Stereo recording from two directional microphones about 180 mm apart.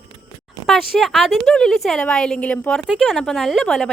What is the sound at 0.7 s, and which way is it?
Speech, centre (ahead or behind).